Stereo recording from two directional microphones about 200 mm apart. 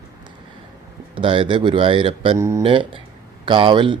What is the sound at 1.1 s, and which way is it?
Speech, 25° right (ahead or behind).